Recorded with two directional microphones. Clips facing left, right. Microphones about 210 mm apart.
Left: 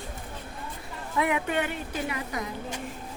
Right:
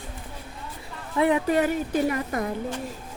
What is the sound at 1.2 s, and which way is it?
A woman's voice, 30° right (ahead or behind).